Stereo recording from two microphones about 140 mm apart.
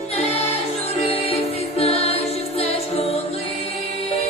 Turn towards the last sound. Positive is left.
turn(degrees=45)  # may be behind; listen again after turning